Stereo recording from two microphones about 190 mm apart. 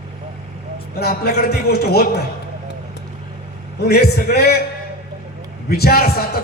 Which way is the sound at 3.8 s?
55° left (ahead or behind).